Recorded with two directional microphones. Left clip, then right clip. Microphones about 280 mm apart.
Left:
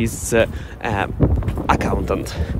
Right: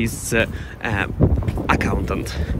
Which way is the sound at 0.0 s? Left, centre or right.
Centre.